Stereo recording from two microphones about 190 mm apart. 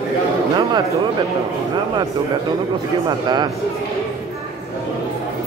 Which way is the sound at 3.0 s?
20° right (ahead or behind).